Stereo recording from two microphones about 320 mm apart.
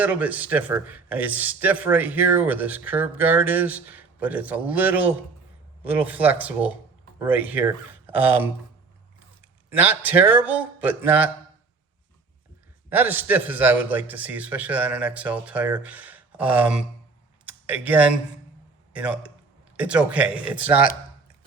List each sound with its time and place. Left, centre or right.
0.0 s a man's voice: centre
9.6 s a man's voice: centre
12.9 s a man's voice: centre
17.4 s a sound: centre
18.9 s a man's voice: centre